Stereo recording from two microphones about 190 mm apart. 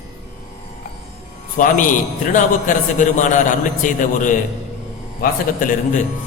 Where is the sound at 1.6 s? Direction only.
45° left (ahead or behind).